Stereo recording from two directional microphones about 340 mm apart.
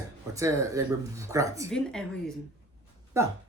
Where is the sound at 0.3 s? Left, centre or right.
Centre.